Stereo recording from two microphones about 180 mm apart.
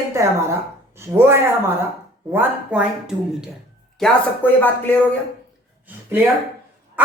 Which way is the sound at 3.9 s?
5° left (ahead or behind).